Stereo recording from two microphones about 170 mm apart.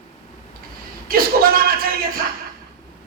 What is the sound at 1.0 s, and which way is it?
Speech, 60° right (ahead or behind).